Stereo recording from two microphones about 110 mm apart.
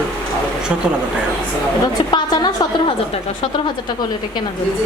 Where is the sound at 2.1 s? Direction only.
40° left (ahead or behind).